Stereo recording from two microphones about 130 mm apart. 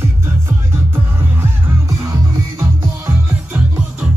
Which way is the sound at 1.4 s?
25° right (ahead or behind).